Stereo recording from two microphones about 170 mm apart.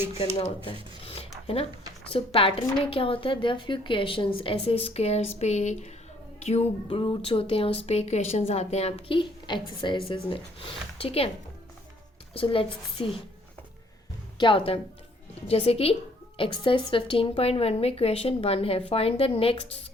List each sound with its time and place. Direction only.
0.3 s speech: 30° left (ahead or behind)
6.8 s speech: 30° left (ahead or behind)
12.3 s speech: 30° left (ahead or behind)
14.3 s speech: 30° left (ahead or behind)